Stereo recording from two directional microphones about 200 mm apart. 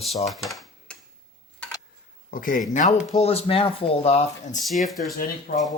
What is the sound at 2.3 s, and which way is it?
Speech, 45° left (ahead or behind).